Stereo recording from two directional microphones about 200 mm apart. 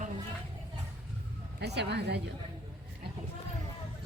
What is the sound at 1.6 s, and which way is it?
Speech, 55° right (ahead or behind).